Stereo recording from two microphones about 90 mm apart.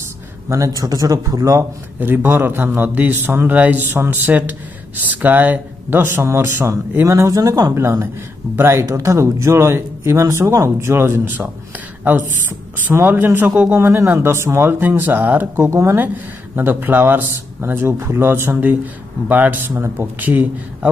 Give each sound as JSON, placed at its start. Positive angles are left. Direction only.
{"t": 0.5, "sound": "speech", "side_deg": -40}
{"t": 2.0, "sound": "speech", "side_deg": -20}
{"t": 7.7, "sound": "speech", "side_deg": -30}